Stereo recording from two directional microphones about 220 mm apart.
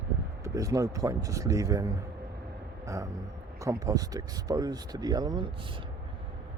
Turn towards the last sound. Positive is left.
turn(degrees=-20)  # may be behind; listen again after turning